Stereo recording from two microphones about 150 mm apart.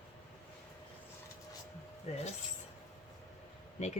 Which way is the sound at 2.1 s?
45° left (ahead or behind).